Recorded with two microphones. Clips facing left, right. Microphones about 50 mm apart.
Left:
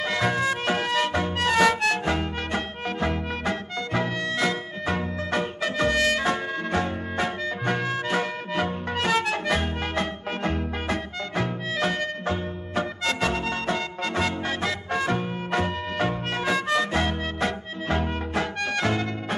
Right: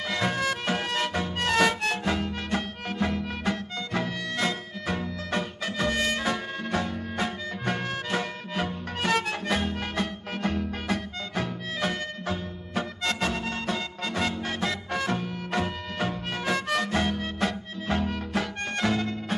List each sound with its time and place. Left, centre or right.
0.0 s music: left
16.6 s music: left
16.9 s music: left